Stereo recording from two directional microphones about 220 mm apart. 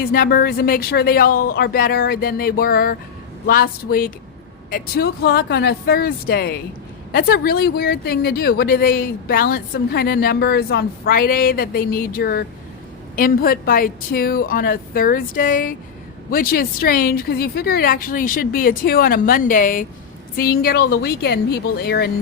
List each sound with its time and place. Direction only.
0.0 s a woman's voice: 40° left (ahead or behind)